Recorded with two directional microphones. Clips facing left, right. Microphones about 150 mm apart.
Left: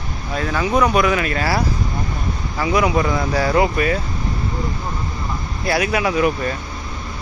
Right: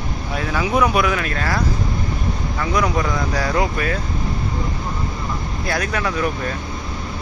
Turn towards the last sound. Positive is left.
turn(degrees=10)  # may be behind; listen again after turning